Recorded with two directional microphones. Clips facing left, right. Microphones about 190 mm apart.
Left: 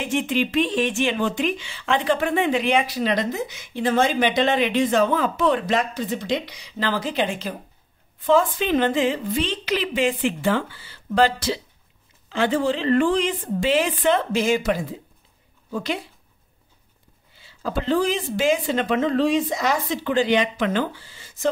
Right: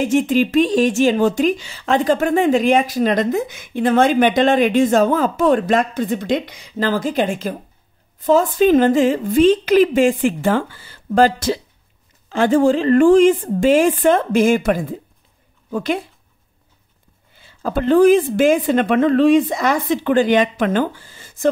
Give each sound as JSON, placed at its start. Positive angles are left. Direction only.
{"t": 0.0, "sound": "speech", "side_deg": -45}
{"t": 17.4, "sound": "speech", "side_deg": -50}